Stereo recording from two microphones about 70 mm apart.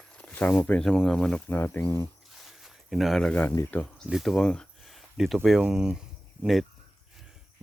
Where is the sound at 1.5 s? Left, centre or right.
Left.